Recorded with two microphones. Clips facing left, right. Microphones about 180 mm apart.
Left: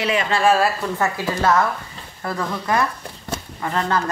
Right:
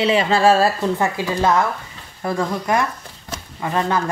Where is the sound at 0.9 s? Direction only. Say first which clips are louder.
Right 2 dB; 15° right (ahead or behind).